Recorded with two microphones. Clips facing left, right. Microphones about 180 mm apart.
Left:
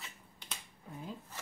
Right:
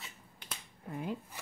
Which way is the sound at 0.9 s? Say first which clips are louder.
Right 7 dB; 65° right (ahead or behind).